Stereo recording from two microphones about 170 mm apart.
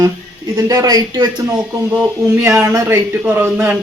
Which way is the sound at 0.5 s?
20° right (ahead or behind).